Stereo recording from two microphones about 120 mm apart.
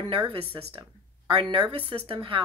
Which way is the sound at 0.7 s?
45° right (ahead or behind).